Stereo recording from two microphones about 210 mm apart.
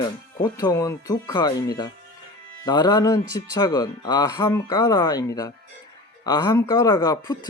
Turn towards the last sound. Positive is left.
turn(degrees=20)  # may be behind; listen again after turning